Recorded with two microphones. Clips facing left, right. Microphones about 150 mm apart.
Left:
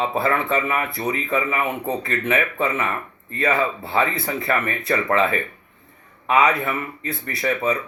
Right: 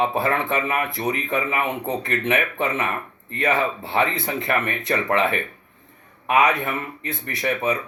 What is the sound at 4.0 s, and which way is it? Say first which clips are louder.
Speech: even; 20° right (ahead or behind).